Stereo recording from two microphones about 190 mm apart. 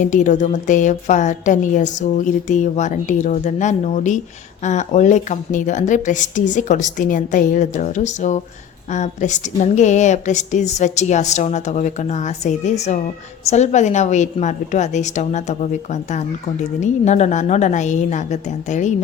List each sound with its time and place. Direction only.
0.0 s a woman's voice: 40° left (ahead or behind)